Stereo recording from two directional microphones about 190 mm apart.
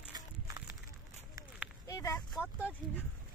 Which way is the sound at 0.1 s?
20° right (ahead or behind).